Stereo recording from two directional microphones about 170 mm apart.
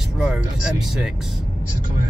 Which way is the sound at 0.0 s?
5° right (ahead or behind).